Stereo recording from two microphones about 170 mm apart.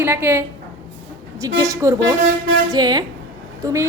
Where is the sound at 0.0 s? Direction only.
15° right (ahead or behind).